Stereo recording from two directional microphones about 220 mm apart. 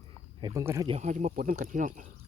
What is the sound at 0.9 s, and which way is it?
Speech, 35° right (ahead or behind).